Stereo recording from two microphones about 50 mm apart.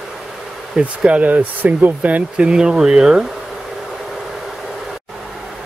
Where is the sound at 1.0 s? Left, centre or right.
Right.